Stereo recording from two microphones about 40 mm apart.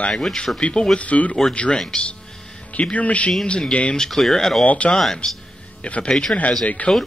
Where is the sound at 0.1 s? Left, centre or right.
Centre.